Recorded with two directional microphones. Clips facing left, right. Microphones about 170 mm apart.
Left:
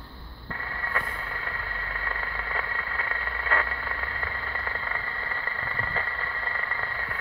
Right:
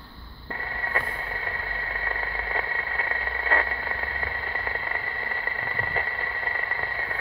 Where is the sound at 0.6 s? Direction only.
25° right (ahead or behind).